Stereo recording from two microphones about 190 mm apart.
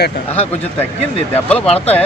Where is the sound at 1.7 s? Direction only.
30° left (ahead or behind).